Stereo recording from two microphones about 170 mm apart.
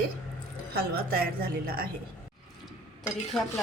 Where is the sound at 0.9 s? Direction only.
60° right (ahead or behind).